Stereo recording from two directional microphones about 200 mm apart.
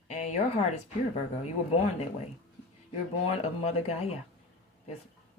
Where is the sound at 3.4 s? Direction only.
30° left (ahead or behind).